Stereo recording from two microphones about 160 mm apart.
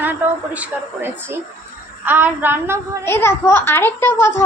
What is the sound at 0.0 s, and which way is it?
A woman's voice, 10° right (ahead or behind).